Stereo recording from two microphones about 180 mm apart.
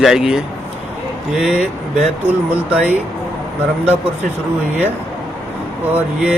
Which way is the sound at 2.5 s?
10° right (ahead or behind).